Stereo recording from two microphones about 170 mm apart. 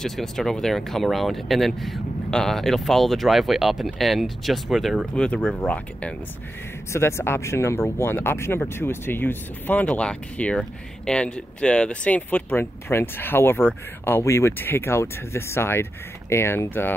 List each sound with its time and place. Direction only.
0.0 s speech: centre (ahead or behind)